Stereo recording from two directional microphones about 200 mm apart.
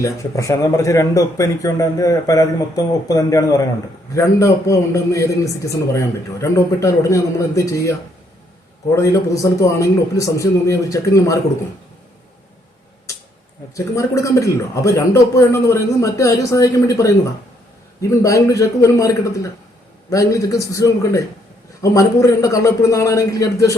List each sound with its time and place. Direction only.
0.0 s a man's voice: 15° left (ahead or behind)
13.7 s a man's voice: 15° left (ahead or behind)